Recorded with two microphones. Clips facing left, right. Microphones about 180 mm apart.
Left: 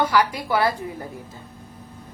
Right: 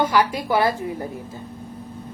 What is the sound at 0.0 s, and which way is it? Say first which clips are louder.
Speech: right 1 dB; 20° right (ahead or behind).